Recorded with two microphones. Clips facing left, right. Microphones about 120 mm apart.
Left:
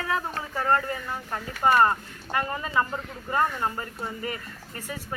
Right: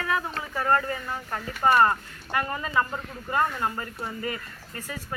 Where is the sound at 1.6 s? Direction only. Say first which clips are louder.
Even; 20° left (ahead or behind).